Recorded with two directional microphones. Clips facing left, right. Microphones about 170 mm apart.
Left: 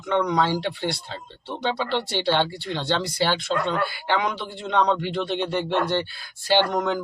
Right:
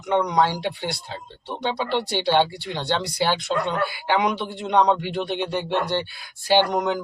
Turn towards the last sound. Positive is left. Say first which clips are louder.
# right 1 dB
turn(degrees=-15)  # may be behind; listen again after turning